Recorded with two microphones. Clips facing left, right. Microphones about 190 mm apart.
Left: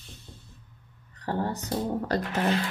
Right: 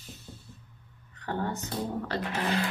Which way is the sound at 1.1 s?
35° left (ahead or behind).